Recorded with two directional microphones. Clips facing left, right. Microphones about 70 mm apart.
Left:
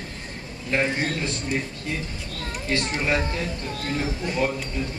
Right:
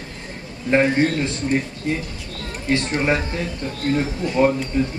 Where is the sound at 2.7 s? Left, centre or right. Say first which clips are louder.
Right 6 dB; right.